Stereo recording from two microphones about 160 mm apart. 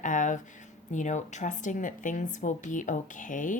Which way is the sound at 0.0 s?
50° left (ahead or behind).